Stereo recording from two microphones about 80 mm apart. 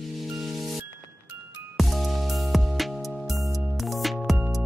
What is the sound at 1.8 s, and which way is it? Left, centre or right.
Music, centre.